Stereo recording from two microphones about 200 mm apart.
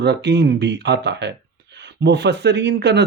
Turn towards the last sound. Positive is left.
turn(degrees=-55)  # may be behind; listen again after turning